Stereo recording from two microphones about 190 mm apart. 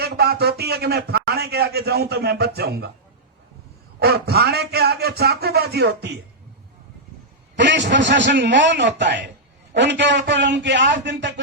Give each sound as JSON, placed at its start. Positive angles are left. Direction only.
{"t": 0.0, "sound": "a man's voice", "side_deg": -55}
{"t": 4.0, "sound": "a man's voice", "side_deg": -55}
{"t": 7.5, "sound": "a man's voice", "side_deg": -70}